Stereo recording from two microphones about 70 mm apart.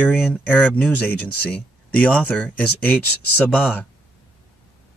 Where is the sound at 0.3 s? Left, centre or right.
Left.